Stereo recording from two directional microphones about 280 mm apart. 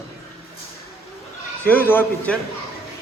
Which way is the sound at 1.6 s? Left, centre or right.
Centre.